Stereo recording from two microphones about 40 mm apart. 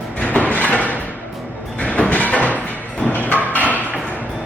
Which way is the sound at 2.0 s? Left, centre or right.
Left.